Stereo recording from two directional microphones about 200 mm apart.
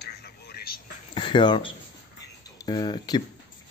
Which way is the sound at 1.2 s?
25° left (ahead or behind).